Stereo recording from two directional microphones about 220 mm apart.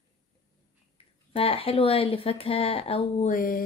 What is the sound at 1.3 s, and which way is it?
A woman's voice, 25° left (ahead or behind).